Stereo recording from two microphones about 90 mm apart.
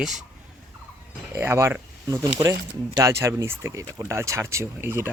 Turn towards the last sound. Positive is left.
turn(degrees=-25)  # may be behind; listen again after turning